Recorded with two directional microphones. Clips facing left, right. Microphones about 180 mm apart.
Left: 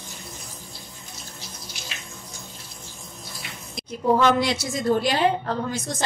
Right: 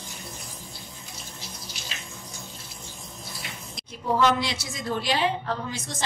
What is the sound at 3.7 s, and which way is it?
A woman's voice, 55° left (ahead or behind).